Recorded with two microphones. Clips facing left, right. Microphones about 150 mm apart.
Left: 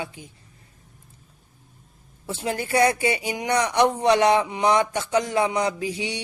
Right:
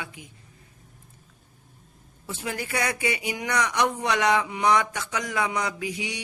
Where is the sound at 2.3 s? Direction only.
30° left (ahead or behind).